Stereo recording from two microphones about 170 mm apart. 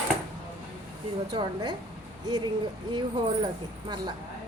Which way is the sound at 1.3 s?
25° right (ahead or behind).